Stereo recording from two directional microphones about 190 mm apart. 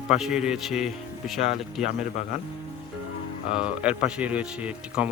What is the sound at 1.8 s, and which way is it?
Speech, 40° left (ahead or behind).